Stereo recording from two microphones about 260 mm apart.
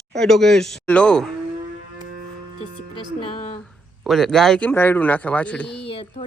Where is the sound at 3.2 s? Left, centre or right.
Centre.